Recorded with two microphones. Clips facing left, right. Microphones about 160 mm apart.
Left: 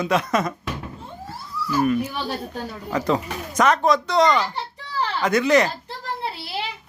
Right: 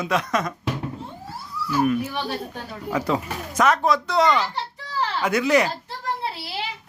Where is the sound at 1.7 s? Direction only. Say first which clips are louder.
Left 1 dB; 5° right (ahead or behind).